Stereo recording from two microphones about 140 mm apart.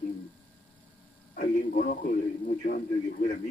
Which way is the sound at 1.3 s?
85° left.